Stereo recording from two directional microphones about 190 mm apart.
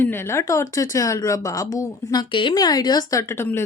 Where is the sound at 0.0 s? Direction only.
10° left (ahead or behind).